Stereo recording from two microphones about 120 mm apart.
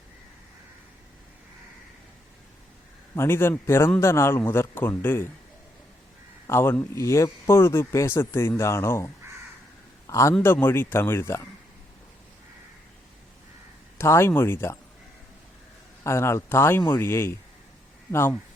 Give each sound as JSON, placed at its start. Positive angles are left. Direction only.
{"t": 3.2, "sound": "a man's voice", "side_deg": 20}
{"t": 6.5, "sound": "a man's voice", "side_deg": 20}
{"t": 10.1, "sound": "a man's voice", "side_deg": 25}
{"t": 14.0, "sound": "a man's voice", "side_deg": 20}
{"t": 16.0, "sound": "a man's voice", "side_deg": 25}